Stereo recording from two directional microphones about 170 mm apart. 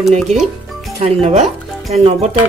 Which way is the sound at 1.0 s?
40° right (ahead or behind).